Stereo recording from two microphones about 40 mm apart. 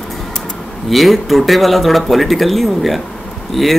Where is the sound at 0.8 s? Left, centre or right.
Centre.